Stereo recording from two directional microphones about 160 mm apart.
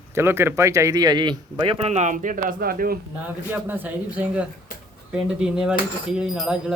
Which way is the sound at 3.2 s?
10° right (ahead or behind).